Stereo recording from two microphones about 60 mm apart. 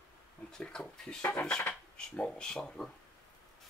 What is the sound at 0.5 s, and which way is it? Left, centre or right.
Speech, centre.